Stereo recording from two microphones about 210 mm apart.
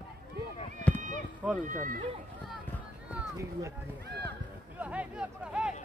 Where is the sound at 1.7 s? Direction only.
40° right (ahead or behind).